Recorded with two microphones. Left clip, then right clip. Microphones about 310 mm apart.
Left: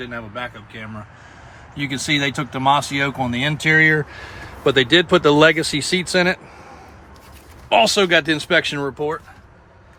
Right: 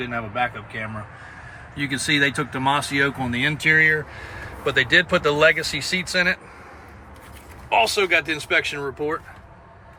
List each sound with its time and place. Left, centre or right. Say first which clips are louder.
1.8 s speech: even; centre
7.7 s speech: left 4 dB; left